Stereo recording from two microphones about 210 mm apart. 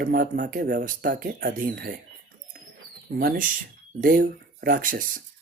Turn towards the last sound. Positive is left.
turn(degrees=-40)  # may be behind; listen again after turning